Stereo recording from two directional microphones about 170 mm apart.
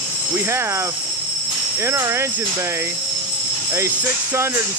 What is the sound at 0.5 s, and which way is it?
Speech, 15° right (ahead or behind).